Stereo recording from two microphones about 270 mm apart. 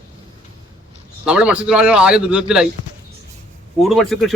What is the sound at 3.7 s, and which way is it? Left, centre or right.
Speech, centre.